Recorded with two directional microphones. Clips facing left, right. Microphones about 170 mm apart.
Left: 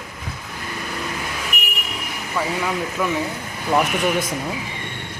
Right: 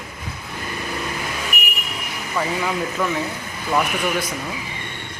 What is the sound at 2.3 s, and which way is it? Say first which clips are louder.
Speech: even; centre (ahead or behind).